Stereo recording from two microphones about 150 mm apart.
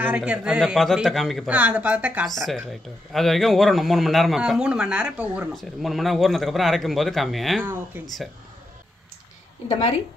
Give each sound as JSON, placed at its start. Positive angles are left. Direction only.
{"t": 0.0, "sound": "a man's voice", "side_deg": -10}
{"t": 1.5, "sound": "speech", "side_deg": -10}
{"t": 2.2, "sound": "a man's voice", "side_deg": 0}
{"t": 7.6, "sound": "speech", "side_deg": -15}
{"t": 9.7, "sound": "speech", "side_deg": 45}